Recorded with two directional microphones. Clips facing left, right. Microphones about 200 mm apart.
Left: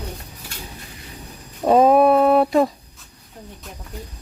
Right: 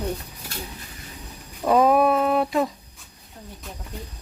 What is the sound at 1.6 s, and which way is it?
Speech, 30° left (ahead or behind).